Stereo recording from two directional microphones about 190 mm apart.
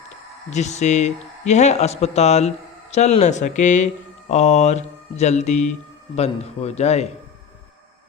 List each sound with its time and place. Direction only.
0.5 s speech: 35° left (ahead or behind)